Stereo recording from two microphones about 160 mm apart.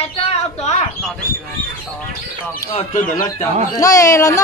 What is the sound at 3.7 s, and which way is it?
Speech, 20° left (ahead or behind).